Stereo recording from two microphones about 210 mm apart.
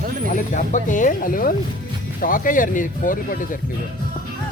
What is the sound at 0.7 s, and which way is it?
Speech, 35° left (ahead or behind).